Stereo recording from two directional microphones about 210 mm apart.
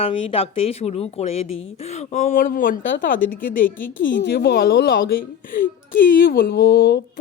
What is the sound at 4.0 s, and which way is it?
Speech, 55° left (ahead or behind).